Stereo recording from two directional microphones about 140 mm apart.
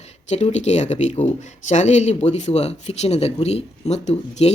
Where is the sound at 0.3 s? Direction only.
50° left (ahead or behind).